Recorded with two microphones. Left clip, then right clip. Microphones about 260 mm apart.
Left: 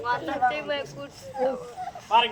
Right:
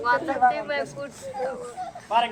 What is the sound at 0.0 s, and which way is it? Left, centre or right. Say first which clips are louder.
Speech: right 4 dB; left.